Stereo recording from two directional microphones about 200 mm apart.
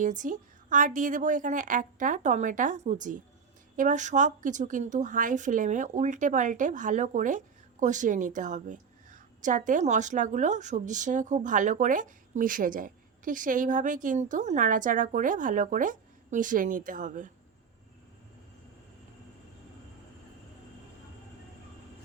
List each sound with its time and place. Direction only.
0.0 s a woman's voice: 40° right (ahead or behind)